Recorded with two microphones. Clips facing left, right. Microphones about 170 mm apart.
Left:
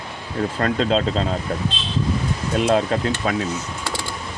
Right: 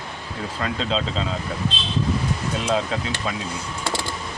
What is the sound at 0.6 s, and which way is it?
Speech, 50° left (ahead or behind).